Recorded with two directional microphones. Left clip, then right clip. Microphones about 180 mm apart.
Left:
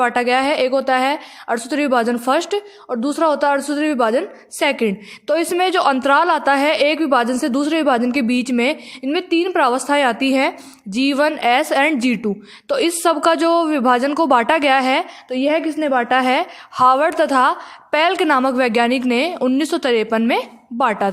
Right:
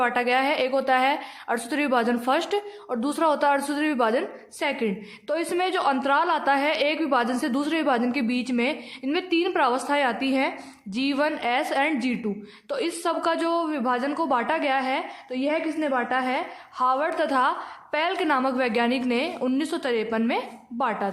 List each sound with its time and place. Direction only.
0.0 s a woman's voice: 30° left (ahead or behind)
4.6 s a woman's voice: 40° left (ahead or behind)